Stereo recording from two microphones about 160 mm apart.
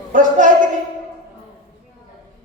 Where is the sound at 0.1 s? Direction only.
55° right (ahead or behind).